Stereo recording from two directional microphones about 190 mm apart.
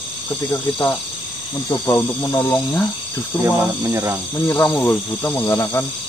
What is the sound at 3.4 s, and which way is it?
Speech, 15° right (ahead or behind).